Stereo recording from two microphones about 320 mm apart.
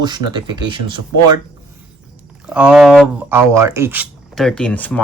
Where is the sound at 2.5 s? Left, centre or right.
Centre.